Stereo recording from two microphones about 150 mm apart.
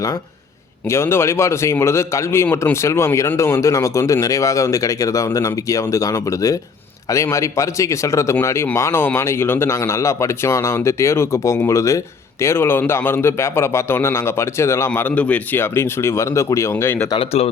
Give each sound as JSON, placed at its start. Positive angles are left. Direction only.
{"t": 0.9, "sound": "a man's voice", "side_deg": 15}
{"t": 17.2, "sound": "speech", "side_deg": 40}